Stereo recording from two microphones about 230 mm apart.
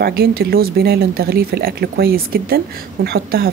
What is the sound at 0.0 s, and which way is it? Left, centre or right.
A woman's voice, right.